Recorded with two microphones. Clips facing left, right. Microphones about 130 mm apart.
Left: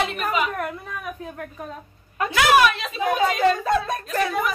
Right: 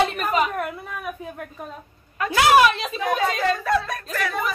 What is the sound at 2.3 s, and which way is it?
Speech, 30° right (ahead or behind).